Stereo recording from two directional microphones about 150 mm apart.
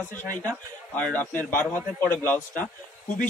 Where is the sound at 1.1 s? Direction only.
10° left (ahead or behind).